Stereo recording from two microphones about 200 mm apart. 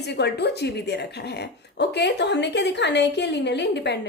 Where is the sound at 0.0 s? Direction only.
55° left (ahead or behind).